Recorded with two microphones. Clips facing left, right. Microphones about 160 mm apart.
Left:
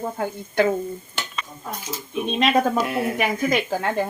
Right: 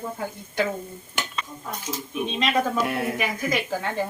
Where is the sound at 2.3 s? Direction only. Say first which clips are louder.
Left 5 dB; 55° left (ahead or behind).